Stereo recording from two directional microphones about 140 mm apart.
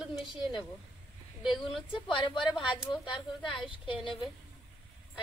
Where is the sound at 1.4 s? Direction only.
Centre (ahead or behind).